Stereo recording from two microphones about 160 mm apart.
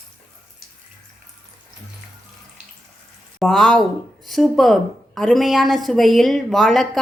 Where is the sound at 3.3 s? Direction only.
Centre (ahead or behind).